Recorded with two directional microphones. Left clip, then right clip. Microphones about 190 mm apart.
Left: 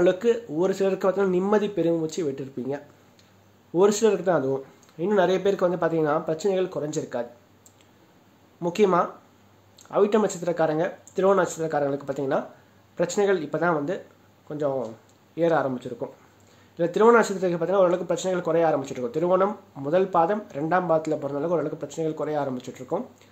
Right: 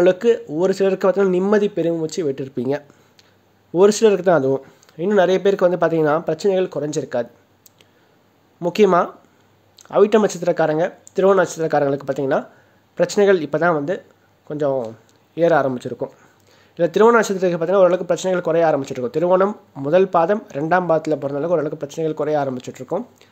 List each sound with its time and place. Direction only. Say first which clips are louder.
0.0 s speech: right 6 dB; 40° right (ahead or behind)
8.5 s speech: right 6 dB; 40° right (ahead or behind)